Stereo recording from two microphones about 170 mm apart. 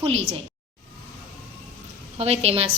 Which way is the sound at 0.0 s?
35° right (ahead or behind).